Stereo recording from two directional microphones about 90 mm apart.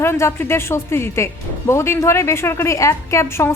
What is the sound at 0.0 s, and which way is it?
Speech, 30° left (ahead or behind).